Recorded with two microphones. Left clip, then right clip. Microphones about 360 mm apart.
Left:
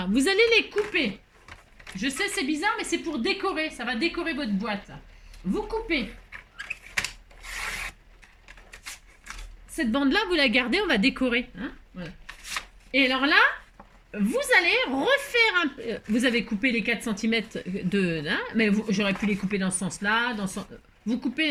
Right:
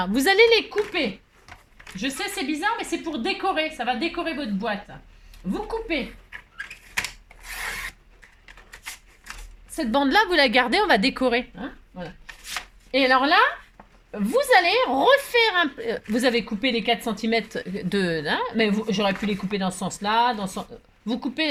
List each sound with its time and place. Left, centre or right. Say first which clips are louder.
0.0 s a woman's voice: right 5 dB; centre
9.7 s a woman's voice: right 5 dB; centre
12.2 s shuffling cards: right 1 dB; centre
12.9 s a woman's voice: right 3 dB; centre